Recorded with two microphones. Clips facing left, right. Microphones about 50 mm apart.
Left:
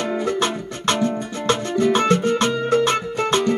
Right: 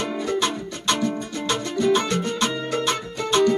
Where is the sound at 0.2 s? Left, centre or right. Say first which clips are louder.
Left 2 dB; left.